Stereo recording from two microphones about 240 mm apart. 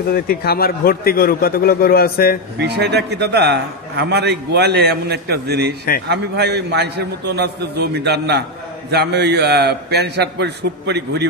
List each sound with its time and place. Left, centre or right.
0.1 s a man's voice: left
2.6 s a man's voice: right